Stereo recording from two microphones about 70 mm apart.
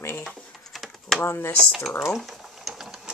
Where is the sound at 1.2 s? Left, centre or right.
Left.